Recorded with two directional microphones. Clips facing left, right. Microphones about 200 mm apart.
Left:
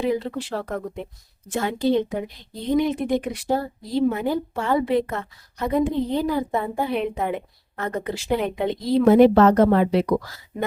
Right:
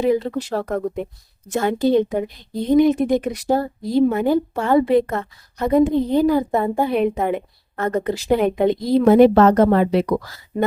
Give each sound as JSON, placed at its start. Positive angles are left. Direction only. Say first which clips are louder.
{"t": 0.0, "sound": "a woman's voice", "louder": "right 5 dB", "side_deg": -40}